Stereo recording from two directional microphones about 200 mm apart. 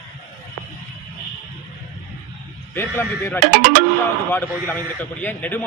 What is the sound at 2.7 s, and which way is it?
Speech, 10° left (ahead or behind).